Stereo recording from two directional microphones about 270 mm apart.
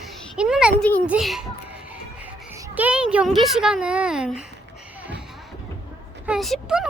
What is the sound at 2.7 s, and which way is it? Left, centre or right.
Speech, centre.